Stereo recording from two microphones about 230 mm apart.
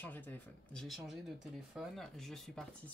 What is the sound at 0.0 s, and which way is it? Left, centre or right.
Speech, centre.